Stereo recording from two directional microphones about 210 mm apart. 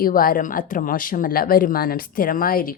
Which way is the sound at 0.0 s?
45° left (ahead or behind).